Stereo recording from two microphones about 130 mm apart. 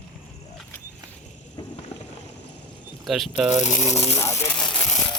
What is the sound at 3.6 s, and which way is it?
Speech, 65° left (ahead or behind).